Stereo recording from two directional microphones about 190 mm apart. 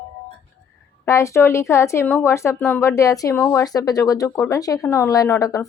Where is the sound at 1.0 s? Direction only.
15° left (ahead or behind).